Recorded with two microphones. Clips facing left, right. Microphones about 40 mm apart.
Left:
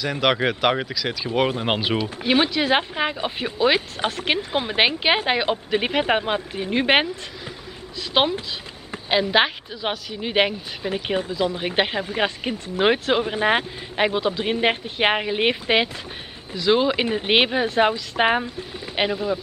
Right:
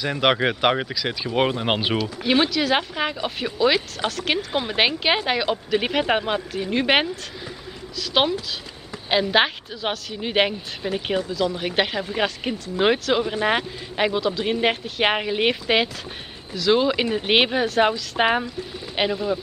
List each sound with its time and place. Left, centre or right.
0.2 s a woman's voice: centre
2.2 s speech: centre
2.5 s speech: left
5.8 s speech: centre
6.5 s speech: centre
8.1 s speech: centre
9.1 s a woman's voice: centre
11.1 s speech: left
12.1 s speech: centre
12.5 s speech: left
13.1 s speech: centre
16.5 s speech: centre